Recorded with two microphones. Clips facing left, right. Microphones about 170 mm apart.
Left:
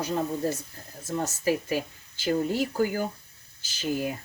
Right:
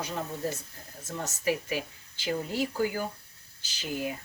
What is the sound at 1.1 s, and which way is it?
A woman's voice, 35° left (ahead or behind).